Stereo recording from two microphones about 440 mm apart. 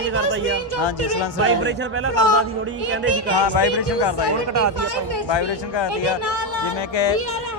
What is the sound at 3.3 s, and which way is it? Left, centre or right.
Speech, left.